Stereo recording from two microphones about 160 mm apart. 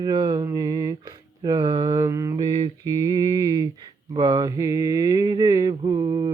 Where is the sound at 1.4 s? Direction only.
30° right (ahead or behind).